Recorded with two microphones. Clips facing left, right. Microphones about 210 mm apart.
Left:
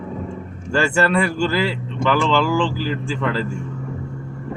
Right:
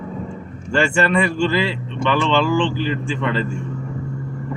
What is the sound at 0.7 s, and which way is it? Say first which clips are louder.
Speech: even; 5° left (ahead or behind).